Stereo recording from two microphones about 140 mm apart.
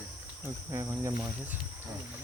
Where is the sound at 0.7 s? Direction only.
20° right (ahead or behind).